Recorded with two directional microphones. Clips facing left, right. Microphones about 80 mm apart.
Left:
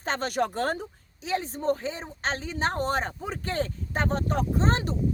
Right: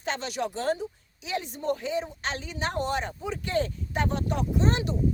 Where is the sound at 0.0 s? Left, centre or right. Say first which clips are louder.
Left 3 dB; left.